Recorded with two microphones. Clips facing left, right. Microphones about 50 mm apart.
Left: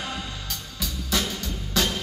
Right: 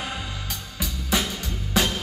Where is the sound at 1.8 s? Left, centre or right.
Right.